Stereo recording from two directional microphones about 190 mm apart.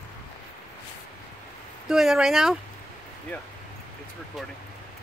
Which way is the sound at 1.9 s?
Centre (ahead or behind).